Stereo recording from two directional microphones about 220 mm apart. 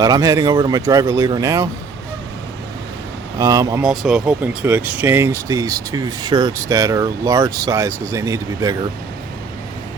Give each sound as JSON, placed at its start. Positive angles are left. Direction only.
{"t": 0.0, "sound": "speech", "side_deg": -15}
{"t": 3.3, "sound": "speech", "side_deg": -15}
{"t": 3.8, "sound": "speech", "side_deg": -5}